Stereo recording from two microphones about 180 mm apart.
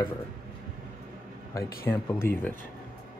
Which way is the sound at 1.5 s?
15° left (ahead or behind).